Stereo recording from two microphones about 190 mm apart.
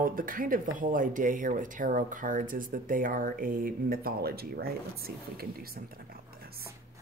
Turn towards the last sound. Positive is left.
turn(degrees=-55)  # may be behind; listen again after turning